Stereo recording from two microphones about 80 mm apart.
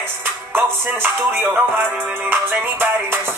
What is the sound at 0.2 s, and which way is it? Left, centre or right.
Music, right.